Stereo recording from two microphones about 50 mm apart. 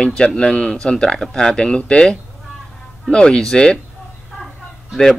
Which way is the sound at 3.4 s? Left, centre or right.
Centre.